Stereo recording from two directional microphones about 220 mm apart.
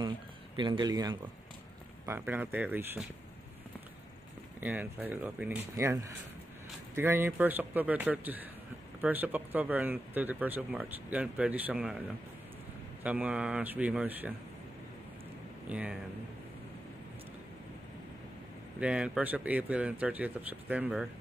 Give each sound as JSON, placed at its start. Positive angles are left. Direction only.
{"t": 0.6, "sound": "speech", "side_deg": -20}
{"t": 4.6, "sound": "speech", "side_deg": -10}
{"t": 13.0, "sound": "speech", "side_deg": -5}
{"t": 15.7, "sound": "speech", "side_deg": -5}
{"t": 18.8, "sound": "speech", "side_deg": -5}